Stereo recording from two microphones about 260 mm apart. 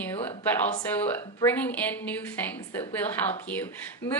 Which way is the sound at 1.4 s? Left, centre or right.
Centre.